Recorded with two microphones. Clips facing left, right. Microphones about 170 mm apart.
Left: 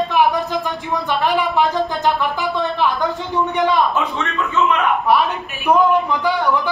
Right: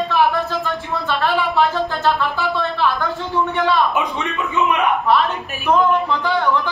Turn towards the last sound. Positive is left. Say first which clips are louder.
# left 1 dB
turn(degrees=10)  # may be behind; listen again after turning